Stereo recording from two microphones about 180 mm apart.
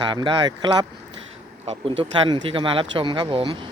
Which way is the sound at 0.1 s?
25° right (ahead or behind).